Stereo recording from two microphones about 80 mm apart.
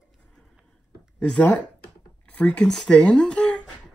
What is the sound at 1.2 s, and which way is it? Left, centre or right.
Speech, centre.